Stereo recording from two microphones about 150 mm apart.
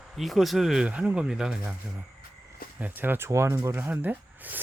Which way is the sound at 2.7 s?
10° right (ahead or behind).